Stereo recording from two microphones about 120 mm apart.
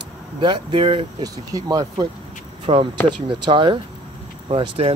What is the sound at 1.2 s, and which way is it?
Speech, 30° right (ahead or behind).